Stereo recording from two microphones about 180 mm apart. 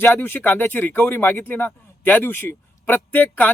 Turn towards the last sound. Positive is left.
turn(degrees=10)  # may be behind; listen again after turning